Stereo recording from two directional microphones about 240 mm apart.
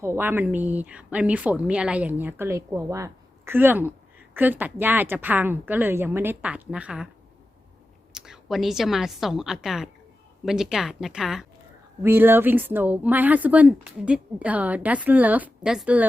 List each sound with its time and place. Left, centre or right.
0.0 s speech: centre
8.1 s a woman's voice: centre